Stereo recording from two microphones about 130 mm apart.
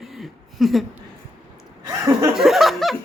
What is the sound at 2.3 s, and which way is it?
Speech, centre (ahead or behind).